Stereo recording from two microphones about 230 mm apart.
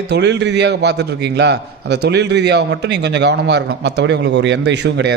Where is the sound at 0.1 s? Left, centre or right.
Right.